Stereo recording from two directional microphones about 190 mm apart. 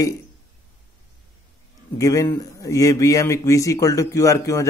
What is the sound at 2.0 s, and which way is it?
A man's voice, 15° left (ahead or behind).